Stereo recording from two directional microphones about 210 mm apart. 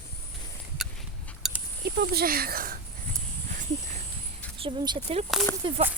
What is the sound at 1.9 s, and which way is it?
Speech, 50° right (ahead or behind).